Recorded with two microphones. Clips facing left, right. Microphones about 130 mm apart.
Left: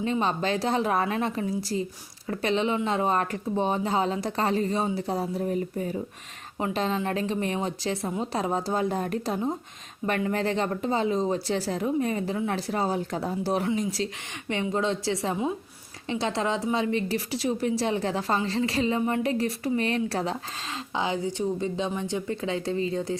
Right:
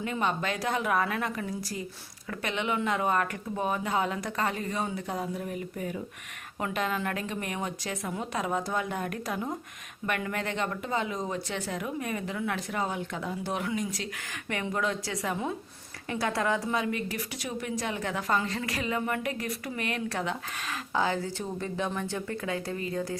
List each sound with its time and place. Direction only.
0.0 s a woman's voice: 30° left (ahead or behind)
20.9 s a woman's voice: 20° left (ahead or behind)